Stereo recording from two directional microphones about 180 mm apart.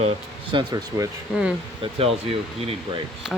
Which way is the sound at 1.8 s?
35° right (ahead or behind).